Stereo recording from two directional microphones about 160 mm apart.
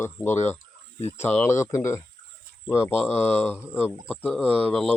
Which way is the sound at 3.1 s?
15° left (ahead or behind).